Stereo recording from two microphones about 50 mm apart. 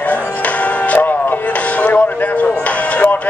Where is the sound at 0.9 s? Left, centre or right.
Left.